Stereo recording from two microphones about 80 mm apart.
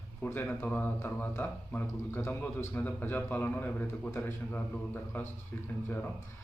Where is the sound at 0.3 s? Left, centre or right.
Left.